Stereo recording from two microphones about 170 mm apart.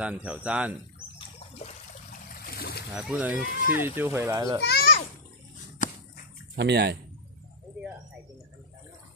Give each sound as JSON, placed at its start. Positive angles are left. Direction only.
{"t": 0.0, "sound": "a child's voice", "side_deg": -5}
{"t": 1.5, "sound": "water", "side_deg": 35}
{"t": 2.4, "sound": "splash", "side_deg": 60}
{"t": 2.9, "sound": "a child's voice", "side_deg": -5}
{"t": 4.6, "sound": "children playing", "side_deg": 70}
{"t": 5.8, "sound": "a sound", "side_deg": 45}
{"t": 6.6, "sound": "speech", "side_deg": -75}